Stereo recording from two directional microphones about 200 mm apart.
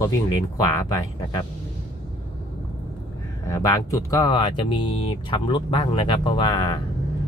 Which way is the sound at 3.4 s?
15° left (ahead or behind).